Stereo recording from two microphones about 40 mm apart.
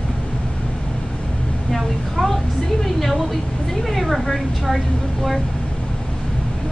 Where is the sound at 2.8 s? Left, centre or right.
Centre.